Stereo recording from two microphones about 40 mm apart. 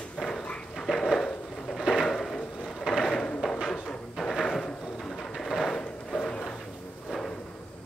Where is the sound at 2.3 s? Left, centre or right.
Left.